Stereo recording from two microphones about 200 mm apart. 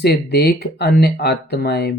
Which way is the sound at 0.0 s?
55° left (ahead or behind).